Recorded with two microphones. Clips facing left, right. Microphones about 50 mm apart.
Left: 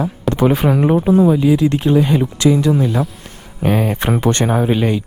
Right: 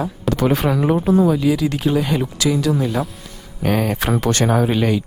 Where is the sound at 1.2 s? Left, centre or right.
Left.